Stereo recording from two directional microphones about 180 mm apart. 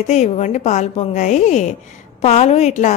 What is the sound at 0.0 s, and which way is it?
A woman's voice, 40° left (ahead or behind).